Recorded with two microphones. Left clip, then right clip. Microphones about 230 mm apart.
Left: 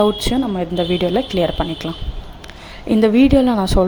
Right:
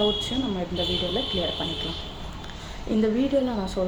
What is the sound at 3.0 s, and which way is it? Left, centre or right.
Speech, left.